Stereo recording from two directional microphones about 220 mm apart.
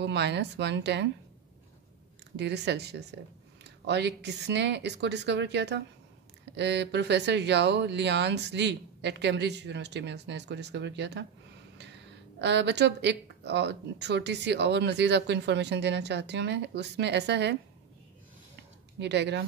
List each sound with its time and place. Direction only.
0.0 s speech: 50° right (ahead or behind)
2.3 s speech: 50° right (ahead or behind)
12.4 s speech: 50° right (ahead or behind)
18.6 s a sound: 50° right (ahead or behind)